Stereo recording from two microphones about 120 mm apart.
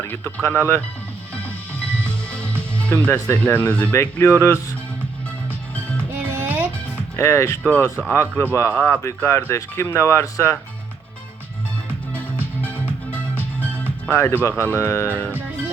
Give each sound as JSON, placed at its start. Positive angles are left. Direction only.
{"t": 0.0, "sound": "speech", "side_deg": 15}
{"t": 2.0, "sound": "music", "side_deg": 10}
{"t": 3.3, "sound": "speech", "side_deg": 15}
{"t": 5.7, "sound": "music", "side_deg": 15}
{"t": 6.1, "sound": "music", "side_deg": -15}
{"t": 7.2, "sound": "speech", "side_deg": 20}
{"t": 12.1, "sound": "music", "side_deg": 15}
{"t": 14.1, "sound": "speech", "side_deg": 15}